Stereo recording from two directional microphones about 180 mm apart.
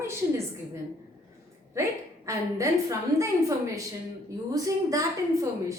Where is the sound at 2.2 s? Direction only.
15° right (ahead or behind).